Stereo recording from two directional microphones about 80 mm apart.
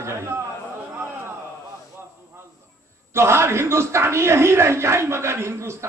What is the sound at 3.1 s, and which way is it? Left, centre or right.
A man's voice, right.